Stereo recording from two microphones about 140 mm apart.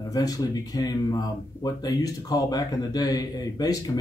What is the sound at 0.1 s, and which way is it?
Speech, 25° left (ahead or behind).